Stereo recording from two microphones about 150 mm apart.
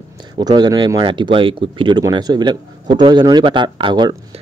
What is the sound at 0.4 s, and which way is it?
Speech, 25° right (ahead or behind).